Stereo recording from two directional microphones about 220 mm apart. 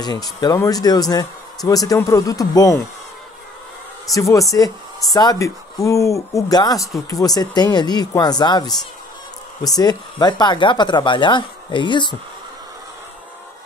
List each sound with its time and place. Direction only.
0.0 s speech: 20° left (ahead or behind)
4.1 s speech: 15° left (ahead or behind)
9.8 s speech: 20° left (ahead or behind)